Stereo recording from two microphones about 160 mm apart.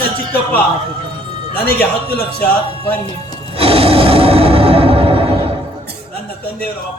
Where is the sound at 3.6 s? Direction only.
35° right (ahead or behind).